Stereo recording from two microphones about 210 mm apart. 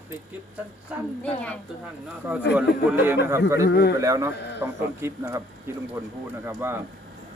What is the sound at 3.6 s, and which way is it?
Speech, 50° left (ahead or behind).